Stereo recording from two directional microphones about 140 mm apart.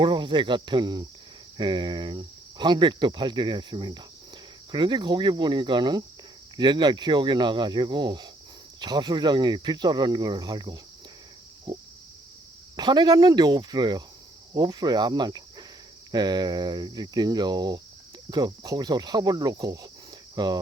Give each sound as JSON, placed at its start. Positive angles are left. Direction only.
{"t": 0.0, "sound": "speech", "side_deg": -35}
{"t": 11.7, "sound": "a sound", "side_deg": -30}
{"t": 12.7, "sound": "speech", "side_deg": -30}
{"t": 14.5, "sound": "cricket", "side_deg": -30}
{"t": 16.1, "sound": "speech", "side_deg": -30}